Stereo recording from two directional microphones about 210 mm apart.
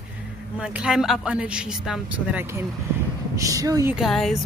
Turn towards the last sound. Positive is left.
turn(degrees=0)  # may be behind; listen again after turning